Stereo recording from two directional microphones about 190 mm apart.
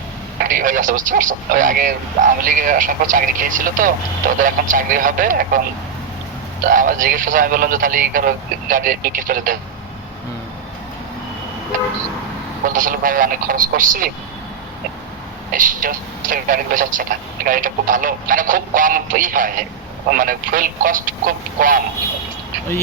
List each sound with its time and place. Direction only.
0.3 s a man's voice: 45° right (ahead or behind)
6.7 s a man's voice: 45° right (ahead or behind)
12.7 s a man's voice: 45° right (ahead or behind)
15.5 s a man's voice: 45° right (ahead or behind)